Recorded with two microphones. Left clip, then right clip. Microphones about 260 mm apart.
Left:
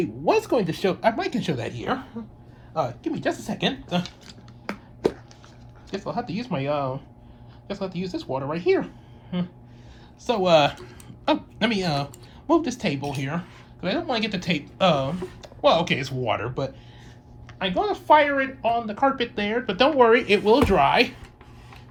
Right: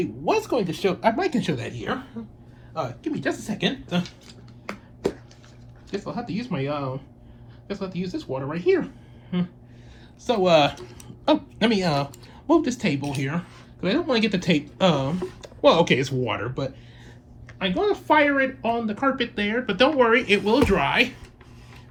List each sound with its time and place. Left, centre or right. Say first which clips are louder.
0.0 s speech: left 2 dB; left
4.0 s a sound: left 1 dB; left
6.1 s speech: left 6 dB; centre
10.2 s speech: even; centre